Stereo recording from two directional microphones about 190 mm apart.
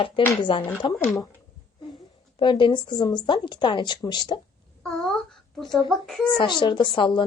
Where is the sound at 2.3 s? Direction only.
25° left (ahead or behind).